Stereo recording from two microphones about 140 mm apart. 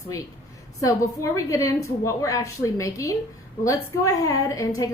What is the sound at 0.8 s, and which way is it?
A woman's voice, 25° left (ahead or behind).